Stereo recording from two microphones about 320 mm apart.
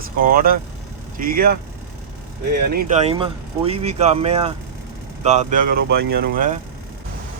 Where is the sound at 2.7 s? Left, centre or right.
Right.